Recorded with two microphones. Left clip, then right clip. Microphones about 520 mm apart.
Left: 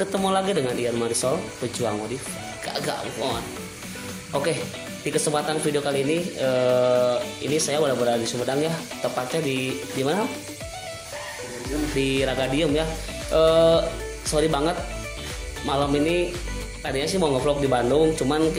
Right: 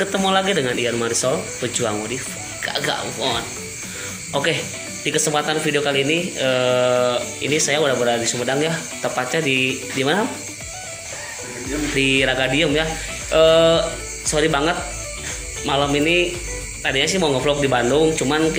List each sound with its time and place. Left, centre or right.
0.0 s speech: left
2.6 s speech: left
12.0 s speech: left
15.6 s music: left
16.8 s speech: left